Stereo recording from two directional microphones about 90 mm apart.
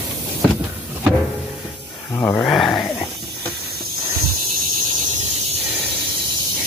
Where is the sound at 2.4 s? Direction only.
5° left (ahead or behind).